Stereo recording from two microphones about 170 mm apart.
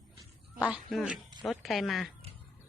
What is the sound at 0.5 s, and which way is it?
Speech, 5° right (ahead or behind).